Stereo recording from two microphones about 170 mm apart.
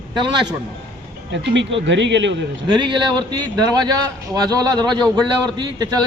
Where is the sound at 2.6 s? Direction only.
30° right (ahead or behind).